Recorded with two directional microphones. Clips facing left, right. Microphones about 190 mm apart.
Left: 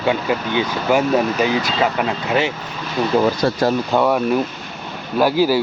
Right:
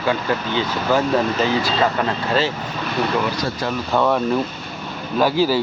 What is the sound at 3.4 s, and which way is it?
Speech, 65° left (ahead or behind).